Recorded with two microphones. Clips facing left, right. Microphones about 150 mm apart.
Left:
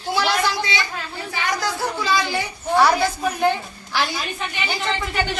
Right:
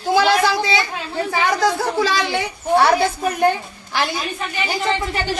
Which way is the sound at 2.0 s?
85° right.